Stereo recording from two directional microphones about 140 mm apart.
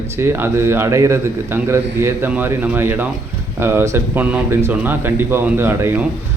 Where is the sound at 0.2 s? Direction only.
15° right (ahead or behind).